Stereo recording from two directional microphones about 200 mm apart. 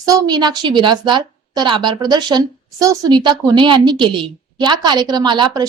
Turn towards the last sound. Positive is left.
turn(degrees=-20)  # may be behind; listen again after turning